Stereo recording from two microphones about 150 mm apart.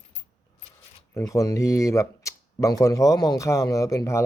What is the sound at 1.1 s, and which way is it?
Speech, 20° left (ahead or behind).